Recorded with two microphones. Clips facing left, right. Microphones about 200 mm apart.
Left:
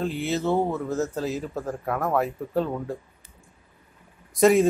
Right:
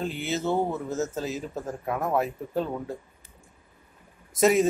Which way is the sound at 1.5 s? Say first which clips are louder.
Left 2 dB; 20° right (ahead or behind).